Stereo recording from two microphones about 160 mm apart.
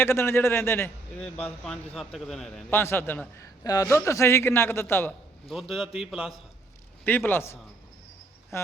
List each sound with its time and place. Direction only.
0.0 s a man's voice: 15° left (ahead or behind)
2.6 s a man's voice: 15° left (ahead or behind)
5.5 s a man's voice: centre (ahead or behind)
7.0 s a man's voice: 10° left (ahead or behind)